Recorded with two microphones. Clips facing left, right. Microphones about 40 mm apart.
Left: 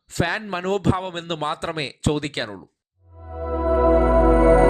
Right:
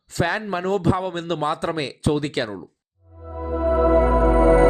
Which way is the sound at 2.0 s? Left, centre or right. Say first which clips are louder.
Right 1 dB; left.